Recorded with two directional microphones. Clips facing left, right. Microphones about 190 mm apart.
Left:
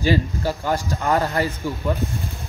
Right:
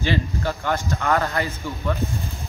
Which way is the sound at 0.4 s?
10° left (ahead or behind).